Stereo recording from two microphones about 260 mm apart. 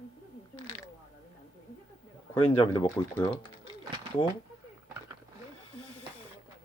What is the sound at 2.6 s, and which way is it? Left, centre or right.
Speech, centre.